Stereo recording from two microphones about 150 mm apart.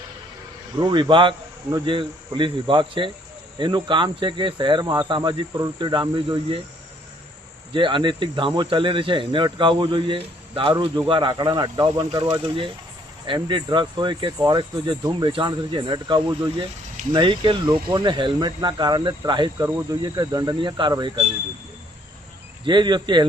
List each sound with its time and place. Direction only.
0.8 s speech: 30° right (ahead or behind)
7.7 s speech: 35° right (ahead or behind)
19.5 s speech: 15° right (ahead or behind)
20.0 s speech: 30° right (ahead or behind)
22.6 s speech: 30° right (ahead or behind)